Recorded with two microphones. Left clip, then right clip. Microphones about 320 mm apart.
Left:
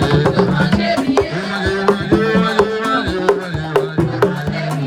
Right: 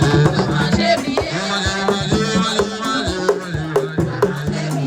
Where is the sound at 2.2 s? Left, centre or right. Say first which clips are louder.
Left 4 dB; centre.